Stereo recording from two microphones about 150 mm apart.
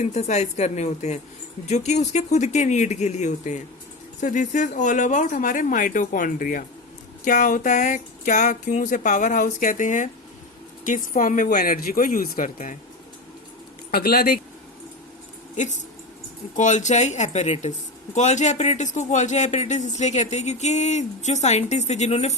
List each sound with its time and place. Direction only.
0.0 s speech: 50° left (ahead or behind)
13.9 s speech: 90° left
15.5 s speech: 55° left (ahead or behind)